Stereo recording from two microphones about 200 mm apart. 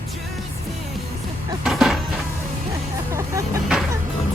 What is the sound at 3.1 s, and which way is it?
Vehicle, 15° right (ahead or behind).